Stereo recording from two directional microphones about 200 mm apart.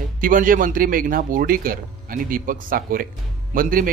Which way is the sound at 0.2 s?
45° right (ahead or behind).